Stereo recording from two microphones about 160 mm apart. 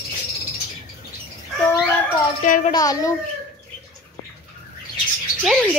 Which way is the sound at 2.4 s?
55° left (ahead or behind).